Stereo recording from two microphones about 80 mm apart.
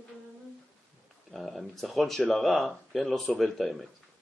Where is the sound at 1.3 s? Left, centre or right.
Centre.